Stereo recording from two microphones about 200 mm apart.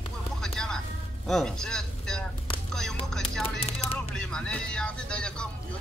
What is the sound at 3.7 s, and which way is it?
Chopping, 30° left (ahead or behind).